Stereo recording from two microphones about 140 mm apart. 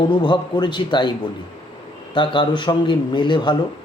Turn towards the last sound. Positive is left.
turn(degrees=35)  # may be behind; listen again after turning